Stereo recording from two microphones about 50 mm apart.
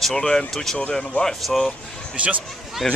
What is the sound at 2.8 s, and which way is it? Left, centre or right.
Speech, centre.